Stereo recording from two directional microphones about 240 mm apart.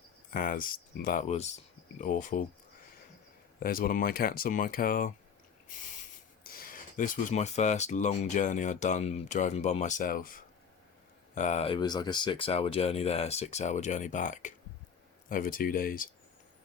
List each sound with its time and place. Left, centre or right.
0.3 s speech: left
3.6 s speech: left
6.4 s speech: left